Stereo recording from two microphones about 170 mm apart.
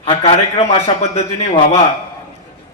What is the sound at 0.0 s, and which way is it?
A man's voice, 35° left (ahead or behind).